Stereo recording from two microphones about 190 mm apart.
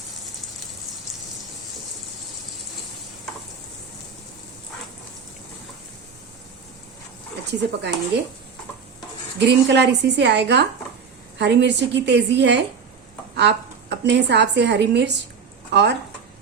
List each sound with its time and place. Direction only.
7.8 s a woman's voice: 65° right (ahead or behind)
9.4 s a woman's voice: 65° right (ahead or behind)